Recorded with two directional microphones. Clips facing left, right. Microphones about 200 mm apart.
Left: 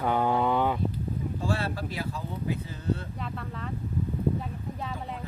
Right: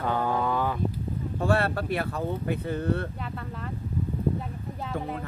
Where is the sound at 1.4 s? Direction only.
60° right (ahead or behind).